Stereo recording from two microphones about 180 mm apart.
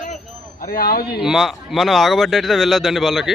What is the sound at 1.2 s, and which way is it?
Speech, centre (ahead or behind).